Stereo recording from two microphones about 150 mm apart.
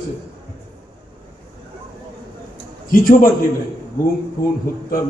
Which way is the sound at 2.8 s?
65° left (ahead or behind).